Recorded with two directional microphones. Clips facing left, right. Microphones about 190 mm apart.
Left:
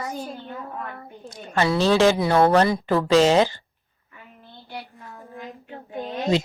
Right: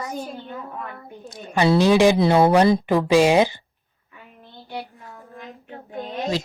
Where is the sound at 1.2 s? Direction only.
10° right (ahead or behind).